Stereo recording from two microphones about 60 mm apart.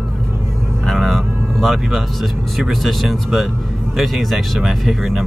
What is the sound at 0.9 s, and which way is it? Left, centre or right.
Speech, centre.